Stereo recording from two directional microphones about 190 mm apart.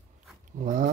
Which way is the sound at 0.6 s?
45° right (ahead or behind).